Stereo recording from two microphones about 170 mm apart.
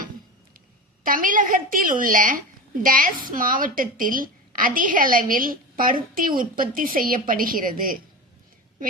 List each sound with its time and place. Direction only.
1.0 s a woman's voice: 55° right (ahead or behind)